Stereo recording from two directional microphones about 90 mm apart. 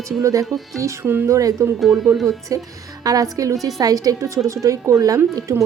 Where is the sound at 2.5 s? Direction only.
40° right (ahead or behind).